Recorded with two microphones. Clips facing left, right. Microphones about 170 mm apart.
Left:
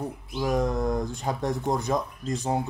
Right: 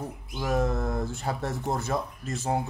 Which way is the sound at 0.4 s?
15° left (ahead or behind).